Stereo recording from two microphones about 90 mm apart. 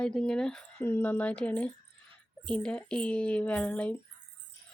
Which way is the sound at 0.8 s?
25° left (ahead or behind).